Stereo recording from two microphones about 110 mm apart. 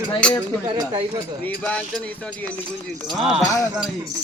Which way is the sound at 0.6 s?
60° right (ahead or behind).